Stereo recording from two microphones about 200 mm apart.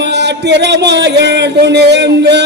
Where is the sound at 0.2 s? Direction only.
60° right (ahead or behind).